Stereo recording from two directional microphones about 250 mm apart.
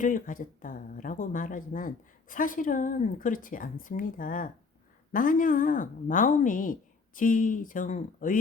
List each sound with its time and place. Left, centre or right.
0.0 s speech: left